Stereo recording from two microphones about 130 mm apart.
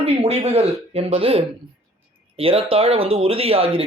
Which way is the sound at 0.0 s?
50° right (ahead or behind).